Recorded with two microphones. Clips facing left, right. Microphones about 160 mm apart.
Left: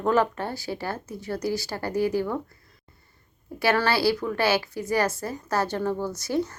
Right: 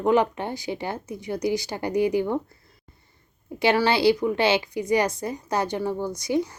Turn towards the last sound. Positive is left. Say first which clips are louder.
# right 2 dB
turn(degrees=-15)  # may be behind; listen again after turning